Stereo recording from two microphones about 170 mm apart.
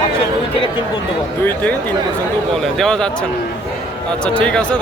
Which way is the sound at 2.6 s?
5° left (ahead or behind).